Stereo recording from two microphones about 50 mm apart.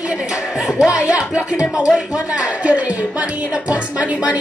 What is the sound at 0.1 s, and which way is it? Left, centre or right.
Music, centre.